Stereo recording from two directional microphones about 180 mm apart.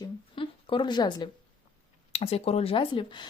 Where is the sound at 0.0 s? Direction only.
25° left (ahead or behind).